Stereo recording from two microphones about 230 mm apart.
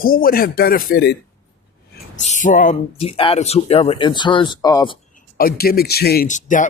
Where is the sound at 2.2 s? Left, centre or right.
Left.